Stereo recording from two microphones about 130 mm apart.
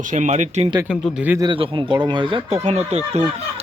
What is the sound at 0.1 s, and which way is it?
Speech, 70° right (ahead or behind).